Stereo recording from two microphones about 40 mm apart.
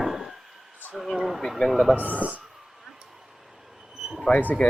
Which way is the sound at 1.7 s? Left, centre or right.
Centre.